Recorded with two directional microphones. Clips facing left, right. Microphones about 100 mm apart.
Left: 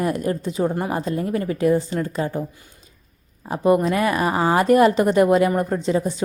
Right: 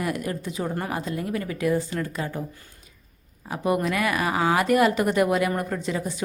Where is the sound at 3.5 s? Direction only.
30° left (ahead or behind).